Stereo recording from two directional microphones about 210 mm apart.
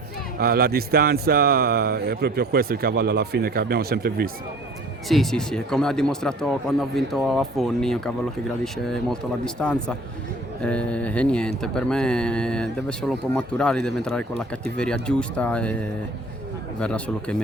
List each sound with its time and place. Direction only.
0.3 s speech: 45° right (ahead or behind)
5.0 s speech: centre (ahead or behind)